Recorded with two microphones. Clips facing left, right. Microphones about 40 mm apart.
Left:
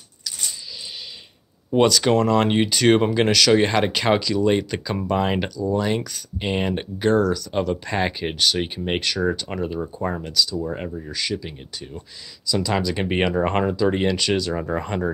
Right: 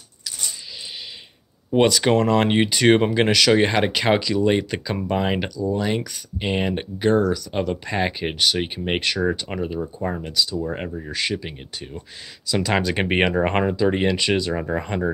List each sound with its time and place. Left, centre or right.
1.7 s speech: centre
7.1 s speech: centre
9.8 s speech: centre
10.7 s speech: right
14.7 s speech: centre